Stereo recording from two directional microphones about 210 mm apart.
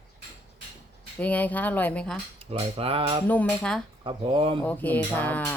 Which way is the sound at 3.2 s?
5° left (ahead or behind).